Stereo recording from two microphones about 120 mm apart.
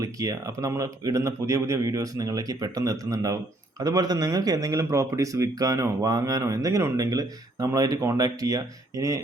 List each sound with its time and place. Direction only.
0.0 s speech: 30° right (ahead or behind)